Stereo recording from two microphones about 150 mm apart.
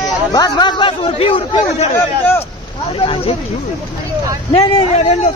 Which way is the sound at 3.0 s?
40° left (ahead or behind).